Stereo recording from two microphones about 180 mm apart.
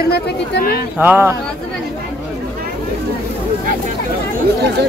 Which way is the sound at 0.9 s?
10° right (ahead or behind).